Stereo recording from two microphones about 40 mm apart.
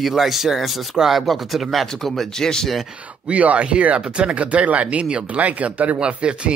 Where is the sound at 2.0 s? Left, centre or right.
Centre.